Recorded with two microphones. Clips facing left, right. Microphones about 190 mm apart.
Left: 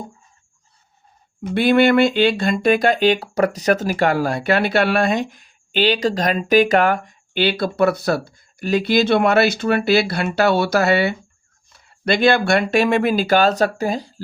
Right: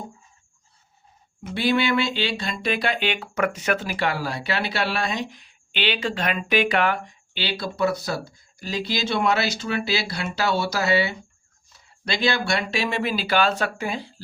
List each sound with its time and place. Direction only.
1.5 s speech: 55° left (ahead or behind)